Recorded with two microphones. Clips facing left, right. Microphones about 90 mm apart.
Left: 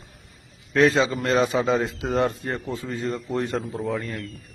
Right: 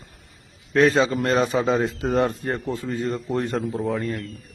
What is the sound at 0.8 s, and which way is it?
Speech, 40° right (ahead or behind).